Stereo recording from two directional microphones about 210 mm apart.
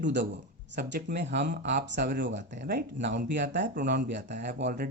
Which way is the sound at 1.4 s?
40° right (ahead or behind).